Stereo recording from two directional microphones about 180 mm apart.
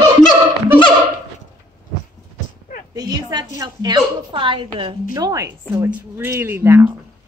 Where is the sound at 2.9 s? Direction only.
20° right (ahead or behind).